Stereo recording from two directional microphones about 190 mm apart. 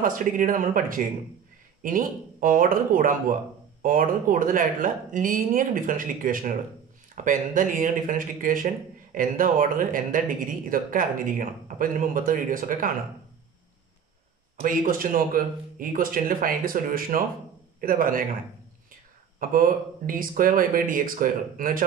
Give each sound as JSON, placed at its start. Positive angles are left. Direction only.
{"t": 0.0, "sound": "speech", "side_deg": -45}
{"t": 14.6, "sound": "a man's voice", "side_deg": -45}
{"t": 19.5, "sound": "speech", "side_deg": -45}